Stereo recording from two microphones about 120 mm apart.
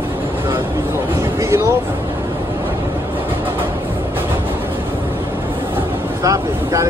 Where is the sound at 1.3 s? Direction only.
25° right (ahead or behind).